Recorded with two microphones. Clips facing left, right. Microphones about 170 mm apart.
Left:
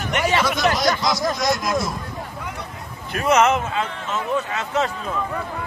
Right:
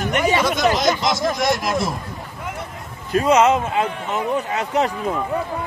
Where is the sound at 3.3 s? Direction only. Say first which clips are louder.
Right 1 dB; 15° right (ahead or behind).